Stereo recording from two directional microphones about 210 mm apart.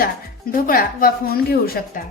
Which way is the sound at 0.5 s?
40° left (ahead or behind).